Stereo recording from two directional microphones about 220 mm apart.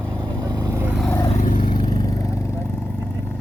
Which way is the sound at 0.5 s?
15° right (ahead or behind).